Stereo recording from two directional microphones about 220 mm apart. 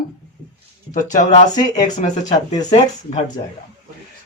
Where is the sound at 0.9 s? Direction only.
35° left (ahead or behind).